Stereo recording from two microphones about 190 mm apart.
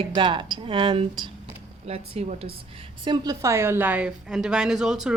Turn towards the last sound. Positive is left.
turn(degrees=0)  # may be behind; listen again after turning